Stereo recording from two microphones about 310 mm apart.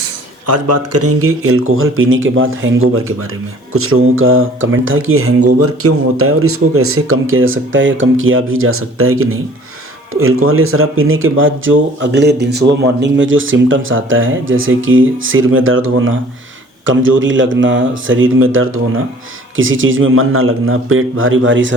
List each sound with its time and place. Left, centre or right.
0.4 s speech: right